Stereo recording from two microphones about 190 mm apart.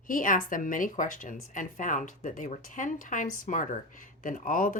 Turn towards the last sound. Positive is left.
turn(degrees=45)  # may be behind; listen again after turning